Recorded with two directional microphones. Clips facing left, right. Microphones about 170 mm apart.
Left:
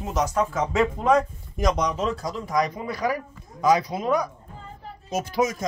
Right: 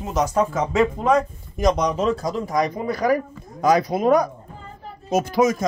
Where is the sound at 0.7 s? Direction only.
30° right (ahead or behind).